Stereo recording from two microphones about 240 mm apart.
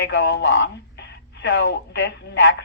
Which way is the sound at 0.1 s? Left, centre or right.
Left.